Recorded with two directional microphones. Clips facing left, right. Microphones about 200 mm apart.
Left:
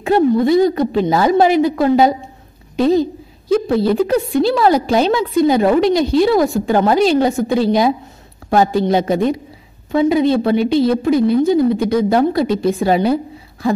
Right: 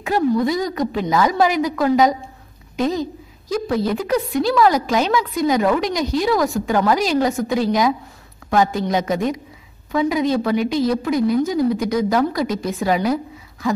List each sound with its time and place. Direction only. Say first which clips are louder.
0.0 s a woman's voice: left 5 dB; 30° left (ahead or behind)